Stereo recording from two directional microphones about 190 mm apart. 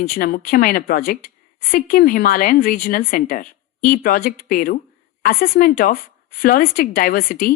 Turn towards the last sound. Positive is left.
turn(degrees=50)  # may be behind; listen again after turning